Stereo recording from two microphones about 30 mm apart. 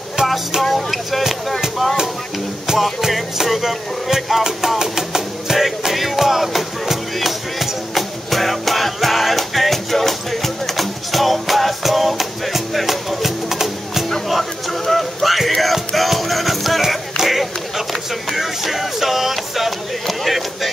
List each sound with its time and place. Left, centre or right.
0.6 s music: centre
3.1 s music: centre
14.3 s music: centre
17.3 s run: centre
18.3 s music: centre